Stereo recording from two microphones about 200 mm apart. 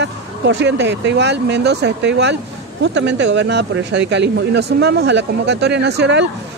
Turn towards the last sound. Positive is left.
turn(degrees=-60)  # may be behind; listen again after turning